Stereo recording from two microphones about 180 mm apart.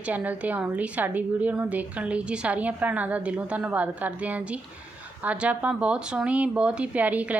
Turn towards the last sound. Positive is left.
turn(degrees=-10)  # may be behind; listen again after turning